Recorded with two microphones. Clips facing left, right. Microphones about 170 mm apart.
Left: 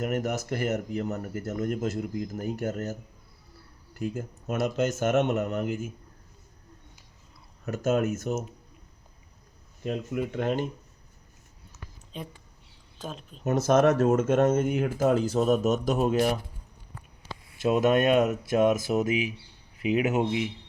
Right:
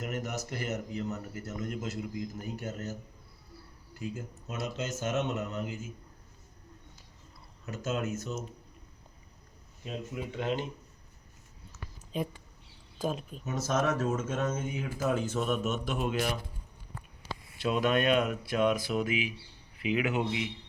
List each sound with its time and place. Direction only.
0.0 s speech: 55° left (ahead or behind)
4.0 s speech: 60° left (ahead or behind)
7.6 s speech: 50° left (ahead or behind)
9.8 s speech: 60° left (ahead or behind)
12.1 s speech: 5° right (ahead or behind)
13.4 s speech: 65° left (ahead or behind)
15.0 s speech: 35° left (ahead or behind)
17.6 s speech: 45° left (ahead or behind)